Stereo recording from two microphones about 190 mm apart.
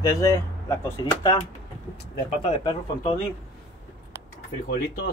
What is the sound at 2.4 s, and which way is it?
Speech, 25° left (ahead or behind).